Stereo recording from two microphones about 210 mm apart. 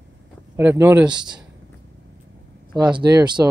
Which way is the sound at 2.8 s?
20° right (ahead or behind).